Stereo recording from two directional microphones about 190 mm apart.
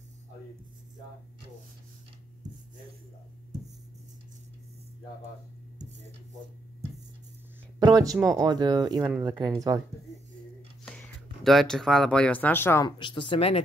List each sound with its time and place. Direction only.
7.8 s a sound: 20° right (ahead or behind)
8.4 s speech: 20° right (ahead or behind)
10.9 s speech: centre (ahead or behind)
13.0 s speech: 25° left (ahead or behind)